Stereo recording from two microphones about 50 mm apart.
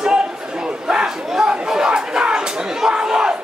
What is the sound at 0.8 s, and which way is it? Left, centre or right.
Speech, centre.